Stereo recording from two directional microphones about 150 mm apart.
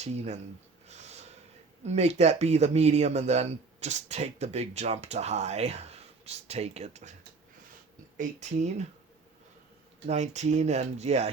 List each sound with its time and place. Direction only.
0.0 s speech: 45° right (ahead or behind)
0.9 s snort: 45° right (ahead or behind)
1.8 s speech: 45° right (ahead or behind)
8.1 s speech: 55° right (ahead or behind)
10.1 s speech: 50° right (ahead or behind)